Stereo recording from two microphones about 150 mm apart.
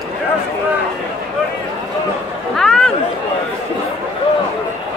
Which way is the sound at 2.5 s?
5° left (ahead or behind).